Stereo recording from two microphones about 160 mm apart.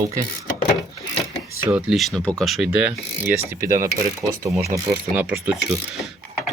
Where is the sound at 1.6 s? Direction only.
10° right (ahead or behind).